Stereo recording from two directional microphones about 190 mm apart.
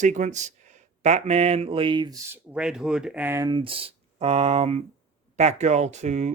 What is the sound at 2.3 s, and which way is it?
Speech, 5° right (ahead or behind).